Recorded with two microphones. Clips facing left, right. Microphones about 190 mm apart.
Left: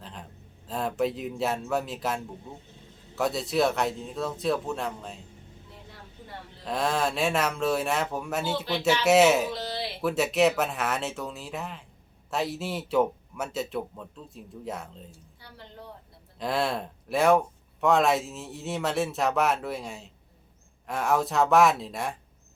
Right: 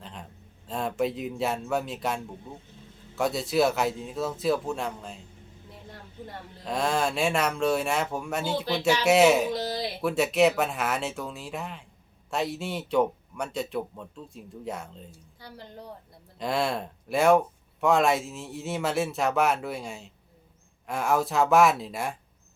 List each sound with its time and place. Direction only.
0.0 s a sound: centre (ahead or behind)
0.7 s speech: centre (ahead or behind)
6.7 s speech: centre (ahead or behind)
9.5 s a sound: 40° right (ahead or behind)
10.0 s speech: centre (ahead or behind)
16.4 s speech: centre (ahead or behind)